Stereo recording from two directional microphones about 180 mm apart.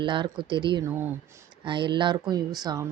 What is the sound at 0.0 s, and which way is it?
Speech, 25° right (ahead or behind).